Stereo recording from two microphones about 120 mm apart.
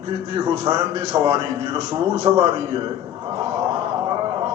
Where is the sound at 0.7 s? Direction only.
35° right (ahead or behind).